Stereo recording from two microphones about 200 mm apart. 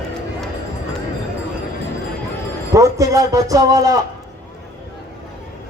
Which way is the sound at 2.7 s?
15° right (ahead or behind).